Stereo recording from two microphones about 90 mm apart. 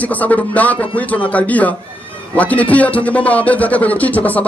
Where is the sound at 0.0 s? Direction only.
15° left (ahead or behind).